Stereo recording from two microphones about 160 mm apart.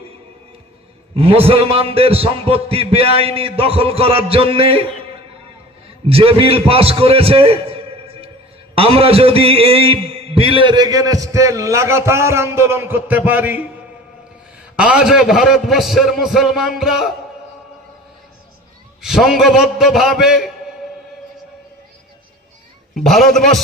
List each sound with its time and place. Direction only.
1.1 s a man's voice: 35° right (ahead or behind)
6.1 s a man's voice: 35° right (ahead or behind); by 13.7 s 10° right (ahead or behind)
14.8 s a man's voice: 5° right (ahead or behind)
19.0 s a man's voice: centre (ahead or behind)
23.0 s a man's voice: centre (ahead or behind)